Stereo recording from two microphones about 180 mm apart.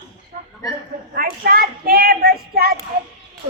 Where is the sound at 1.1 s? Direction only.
55° right (ahead or behind).